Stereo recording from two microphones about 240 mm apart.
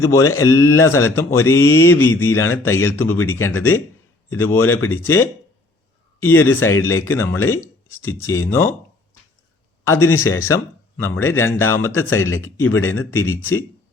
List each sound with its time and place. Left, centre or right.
0.0 s speech: centre
10.0 s speech: centre